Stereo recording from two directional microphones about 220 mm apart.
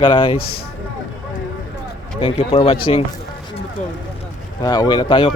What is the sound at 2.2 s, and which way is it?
Speech, 25° left (ahead or behind).